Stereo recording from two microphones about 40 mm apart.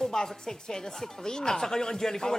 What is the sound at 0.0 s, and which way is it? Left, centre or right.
A woman's voice, centre.